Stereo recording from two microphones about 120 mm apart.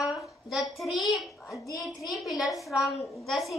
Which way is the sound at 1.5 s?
25° left (ahead or behind).